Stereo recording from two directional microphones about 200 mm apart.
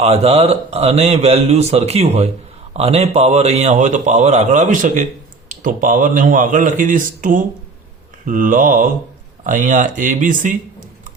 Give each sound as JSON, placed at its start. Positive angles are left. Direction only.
{"t": 0.0, "sound": "speech", "side_deg": -30}